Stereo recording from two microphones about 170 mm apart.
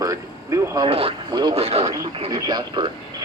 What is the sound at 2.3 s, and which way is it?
Speech, 25° right (ahead or behind).